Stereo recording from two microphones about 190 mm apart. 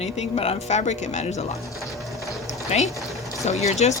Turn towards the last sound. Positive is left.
turn(degrees=35)  # may be behind; listen again after turning